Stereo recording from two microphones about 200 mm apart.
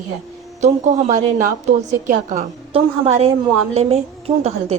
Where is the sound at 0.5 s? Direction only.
35° right (ahead or behind).